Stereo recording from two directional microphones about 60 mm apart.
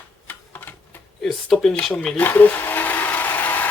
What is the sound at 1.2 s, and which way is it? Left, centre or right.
Speech, centre.